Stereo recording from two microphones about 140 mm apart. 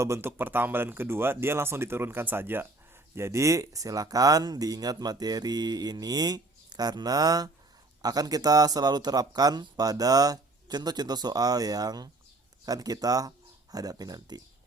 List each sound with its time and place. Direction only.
0.0 s speech: 20° right (ahead or behind)